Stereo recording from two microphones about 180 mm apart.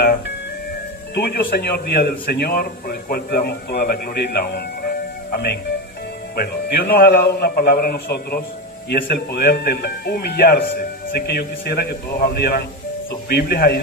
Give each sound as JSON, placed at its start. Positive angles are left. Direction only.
{"t": 1.1, "sound": "a man's voice", "side_deg": 60}